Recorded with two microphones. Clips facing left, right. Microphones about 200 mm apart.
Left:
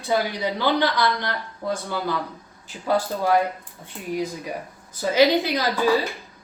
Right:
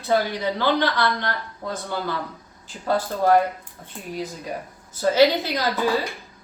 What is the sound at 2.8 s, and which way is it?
Speech, 10° left (ahead or behind).